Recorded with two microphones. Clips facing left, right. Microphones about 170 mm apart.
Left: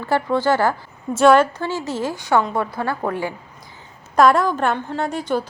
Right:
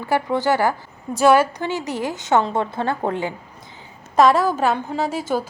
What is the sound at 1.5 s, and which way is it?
A woman's voice, 15° right (ahead or behind).